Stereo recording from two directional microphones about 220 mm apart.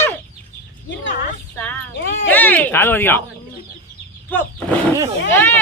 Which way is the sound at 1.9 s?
55° left (ahead or behind).